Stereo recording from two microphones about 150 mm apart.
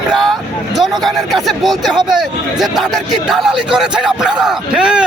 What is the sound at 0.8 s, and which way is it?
Speech, centre (ahead or behind).